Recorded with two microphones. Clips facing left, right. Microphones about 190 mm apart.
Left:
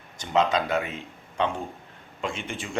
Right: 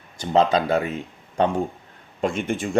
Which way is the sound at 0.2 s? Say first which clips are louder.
Right 5 dB; 35° right (ahead or behind).